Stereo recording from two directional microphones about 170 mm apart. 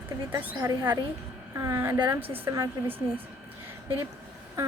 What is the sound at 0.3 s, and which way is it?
A woman's voice, 15° right (ahead or behind).